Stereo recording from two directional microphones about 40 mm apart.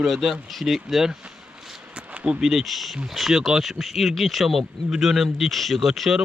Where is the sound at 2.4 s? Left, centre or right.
Centre.